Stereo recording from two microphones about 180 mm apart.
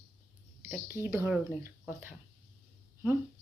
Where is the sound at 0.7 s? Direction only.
10° right (ahead or behind).